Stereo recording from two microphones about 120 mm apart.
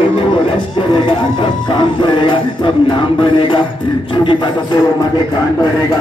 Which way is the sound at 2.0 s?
45° left (ahead or behind).